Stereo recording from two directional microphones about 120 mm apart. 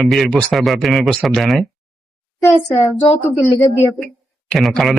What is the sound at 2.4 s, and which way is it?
Speech, 25° left (ahead or behind).